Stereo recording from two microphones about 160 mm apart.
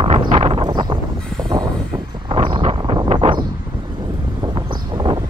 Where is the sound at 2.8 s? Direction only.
30° right (ahead or behind).